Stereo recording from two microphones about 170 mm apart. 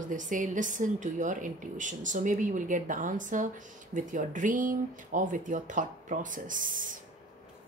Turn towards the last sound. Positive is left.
turn(degrees=-50)  # may be behind; listen again after turning